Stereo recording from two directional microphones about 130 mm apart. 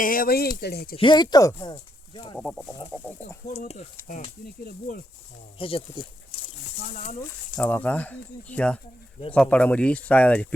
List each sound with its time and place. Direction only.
0.0 s speech: 90° left
0.9 s speech: 35° left (ahead or behind)
2.4 s chicken: 5° left (ahead or behind)
3.0 s speech: 15° left (ahead or behind)
4.0 s speech: 85° left
5.5 s speech: 45° left (ahead or behind)
6.9 s speech: 65° left (ahead or behind)
7.5 s speech: 10° left (ahead or behind)